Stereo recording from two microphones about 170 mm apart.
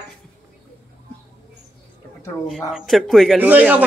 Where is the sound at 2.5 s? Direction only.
Centre (ahead or behind).